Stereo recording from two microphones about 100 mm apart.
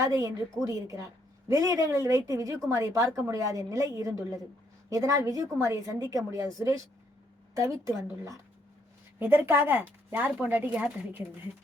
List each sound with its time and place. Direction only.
0.0 s a woman's voice: 35° right (ahead or behind)
9.1 s speech: 20° right (ahead or behind)